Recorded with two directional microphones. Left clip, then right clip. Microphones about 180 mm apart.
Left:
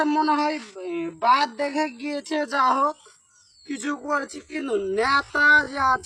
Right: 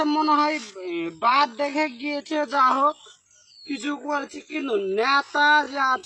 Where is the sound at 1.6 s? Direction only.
15° left (ahead or behind).